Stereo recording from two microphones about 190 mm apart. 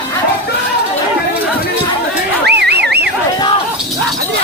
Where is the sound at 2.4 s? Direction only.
60° right (ahead or behind).